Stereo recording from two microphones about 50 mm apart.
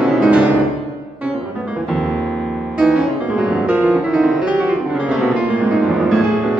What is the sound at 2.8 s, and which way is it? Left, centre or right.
Music, centre.